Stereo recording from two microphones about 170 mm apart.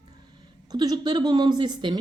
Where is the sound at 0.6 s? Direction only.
25° right (ahead or behind).